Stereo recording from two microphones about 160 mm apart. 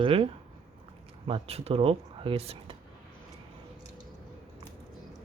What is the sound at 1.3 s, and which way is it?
Speech, 40° right (ahead or behind).